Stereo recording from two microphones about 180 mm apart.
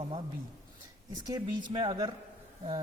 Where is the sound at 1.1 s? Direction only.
20° right (ahead or behind).